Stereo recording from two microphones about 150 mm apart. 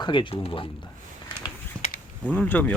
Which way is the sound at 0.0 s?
30° left (ahead or behind).